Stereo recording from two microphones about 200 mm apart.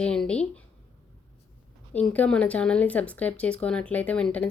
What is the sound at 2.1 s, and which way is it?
Speech, 5° left (ahead or behind).